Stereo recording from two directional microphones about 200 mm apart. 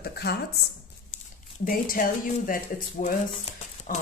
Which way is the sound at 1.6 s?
45° left (ahead or behind).